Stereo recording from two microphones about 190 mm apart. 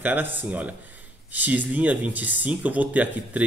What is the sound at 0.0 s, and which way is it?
Speech, 10° right (ahead or behind).